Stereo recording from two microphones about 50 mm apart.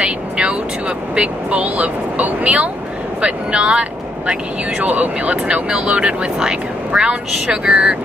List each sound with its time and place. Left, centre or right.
0.0 s speech: right
4.7 s speech: right